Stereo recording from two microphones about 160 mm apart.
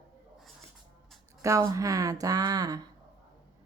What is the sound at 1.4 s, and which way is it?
Speech, 20° right (ahead or behind).